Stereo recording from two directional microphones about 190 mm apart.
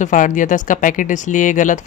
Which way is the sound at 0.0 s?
45° left (ahead or behind).